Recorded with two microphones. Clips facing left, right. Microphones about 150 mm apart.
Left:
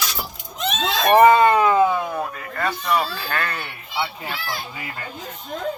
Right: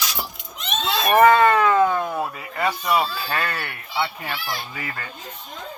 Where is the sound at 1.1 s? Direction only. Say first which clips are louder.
Left 2 dB; 20° left (ahead or behind); by 3.7 s centre (ahead or behind).